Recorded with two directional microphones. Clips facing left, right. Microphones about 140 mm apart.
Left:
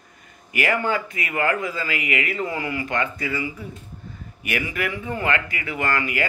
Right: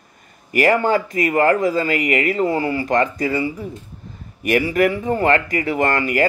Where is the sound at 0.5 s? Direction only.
40° right (ahead or behind).